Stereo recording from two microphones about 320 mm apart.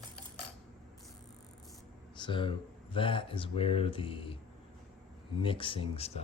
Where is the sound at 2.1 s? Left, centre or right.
Centre.